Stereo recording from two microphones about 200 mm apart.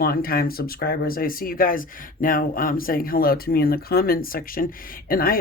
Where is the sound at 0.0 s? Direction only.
45° left (ahead or behind).